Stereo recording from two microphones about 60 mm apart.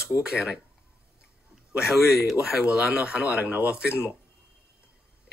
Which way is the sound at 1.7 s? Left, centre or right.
Centre.